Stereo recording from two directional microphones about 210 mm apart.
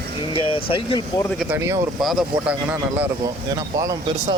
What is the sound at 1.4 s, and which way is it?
Speech, 10° right (ahead or behind).